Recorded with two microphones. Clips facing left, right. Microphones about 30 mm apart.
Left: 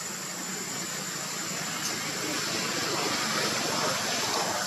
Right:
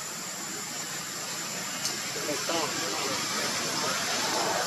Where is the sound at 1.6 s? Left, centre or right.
Centre.